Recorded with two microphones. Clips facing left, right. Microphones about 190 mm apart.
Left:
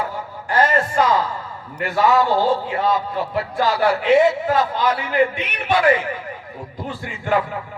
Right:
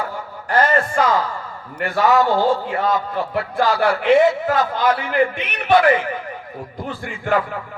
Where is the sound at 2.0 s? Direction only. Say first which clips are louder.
Right 1 dB; 50° right (ahead or behind).